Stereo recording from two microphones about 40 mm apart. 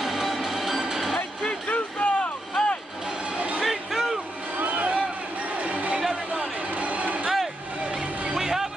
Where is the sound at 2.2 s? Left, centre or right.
Left.